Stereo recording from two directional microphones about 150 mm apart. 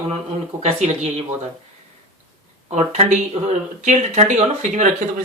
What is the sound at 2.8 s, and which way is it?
Speech, 50° right (ahead or behind).